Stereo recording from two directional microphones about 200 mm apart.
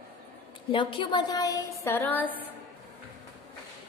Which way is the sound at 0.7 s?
25° left (ahead or behind).